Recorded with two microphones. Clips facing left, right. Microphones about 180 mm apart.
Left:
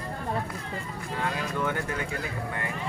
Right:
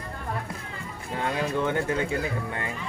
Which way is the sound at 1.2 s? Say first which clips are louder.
Right 4 dB; 25° right (ahead or behind).